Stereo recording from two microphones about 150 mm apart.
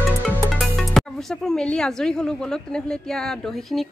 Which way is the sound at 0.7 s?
5° left (ahead or behind).